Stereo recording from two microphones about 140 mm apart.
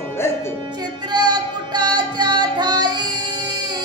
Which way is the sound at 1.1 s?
30° right (ahead or behind).